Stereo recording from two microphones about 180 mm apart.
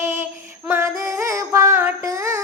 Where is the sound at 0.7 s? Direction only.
15° right (ahead or behind).